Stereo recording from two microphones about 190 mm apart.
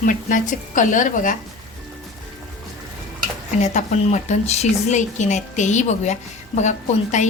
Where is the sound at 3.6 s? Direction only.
40° left (ahead or behind).